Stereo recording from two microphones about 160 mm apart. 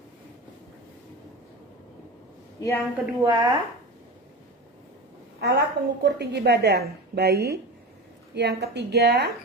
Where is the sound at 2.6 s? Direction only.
20° left (ahead or behind).